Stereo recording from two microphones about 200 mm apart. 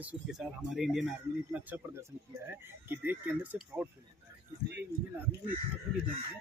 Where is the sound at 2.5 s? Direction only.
10° right (ahead or behind).